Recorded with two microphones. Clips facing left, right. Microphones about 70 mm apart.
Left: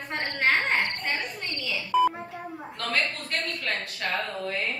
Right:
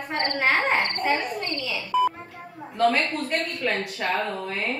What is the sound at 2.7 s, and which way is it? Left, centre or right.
A man's voice, centre.